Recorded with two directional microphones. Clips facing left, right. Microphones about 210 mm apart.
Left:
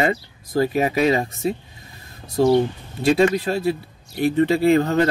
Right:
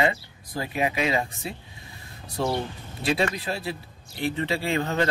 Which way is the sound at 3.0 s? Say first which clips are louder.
Left 9 dB; 45° left (ahead or behind).